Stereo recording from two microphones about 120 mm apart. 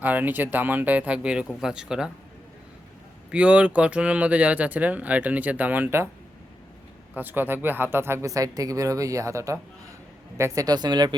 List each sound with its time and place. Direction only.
0.0 s speech: 15° right (ahead or behind)
3.3 s speech: 10° right (ahead or behind)
7.1 s speech: 15° right (ahead or behind); by 11.2 s 35° right (ahead or behind)